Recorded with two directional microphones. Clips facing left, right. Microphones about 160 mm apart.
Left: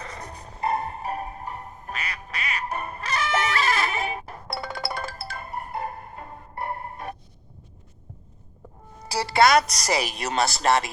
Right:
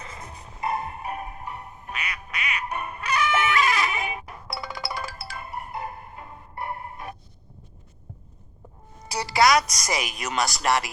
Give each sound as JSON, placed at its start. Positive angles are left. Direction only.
{"t": 0.2, "sound": "music", "side_deg": 35}
{"t": 4.4, "sound": "music", "side_deg": 55}
{"t": 9.1, "sound": "music", "side_deg": 30}
{"t": 9.6, "sound": "a woman's voice", "side_deg": 65}
{"t": 9.9, "sound": "speech", "side_deg": 35}